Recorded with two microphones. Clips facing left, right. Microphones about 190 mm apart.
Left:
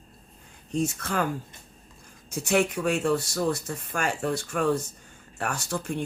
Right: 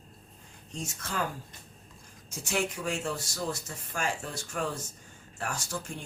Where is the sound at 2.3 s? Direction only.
60° left (ahead or behind).